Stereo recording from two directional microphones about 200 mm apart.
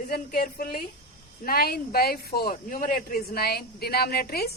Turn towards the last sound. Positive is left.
turn(degrees=50)  # may be behind; listen again after turning